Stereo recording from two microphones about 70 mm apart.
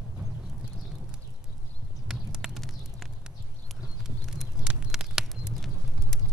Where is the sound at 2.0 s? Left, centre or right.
Centre.